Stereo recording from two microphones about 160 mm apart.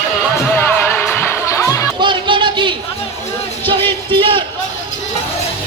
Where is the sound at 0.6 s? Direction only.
10° left (ahead or behind).